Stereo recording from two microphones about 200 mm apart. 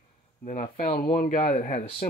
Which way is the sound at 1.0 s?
45° left (ahead or behind).